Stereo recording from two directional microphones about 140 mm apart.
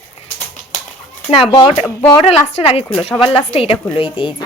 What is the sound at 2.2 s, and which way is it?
Speech, 45° left (ahead or behind).